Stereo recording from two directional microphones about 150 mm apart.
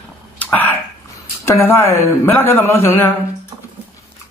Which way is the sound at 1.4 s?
15° left (ahead or behind).